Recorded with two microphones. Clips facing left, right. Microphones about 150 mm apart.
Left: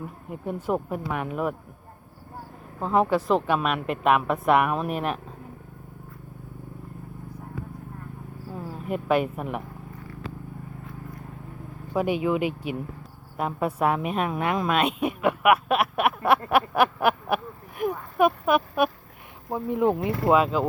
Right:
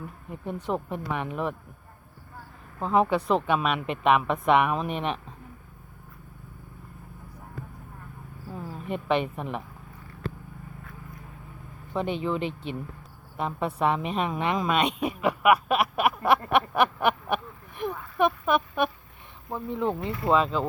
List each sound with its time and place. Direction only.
0.3 s speech: 5° left (ahead or behind)
2.8 s a man's voice: centre (ahead or behind)
8.5 s a woman's voice: 5° left (ahead or behind)
11.9 s a woman's voice: 10° left (ahead or behind)